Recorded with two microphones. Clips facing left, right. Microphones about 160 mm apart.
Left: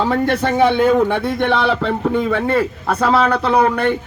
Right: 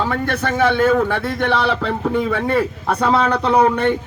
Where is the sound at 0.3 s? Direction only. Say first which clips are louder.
Left 1 dB; 15° left (ahead or behind).